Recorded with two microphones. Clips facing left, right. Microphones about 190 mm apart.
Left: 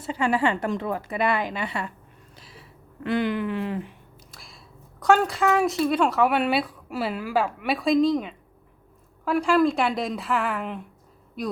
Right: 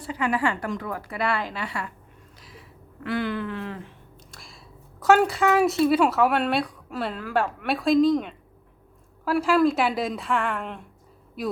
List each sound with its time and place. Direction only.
0.0 s a woman's voice: 30° left (ahead or behind)
2.4 s a sound: 30° left (ahead or behind)
4.3 s a woman's voice: centre (ahead or behind)